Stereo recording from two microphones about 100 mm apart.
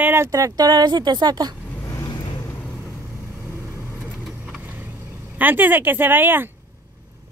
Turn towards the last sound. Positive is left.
turn(degrees=-20)  # may be behind; listen again after turning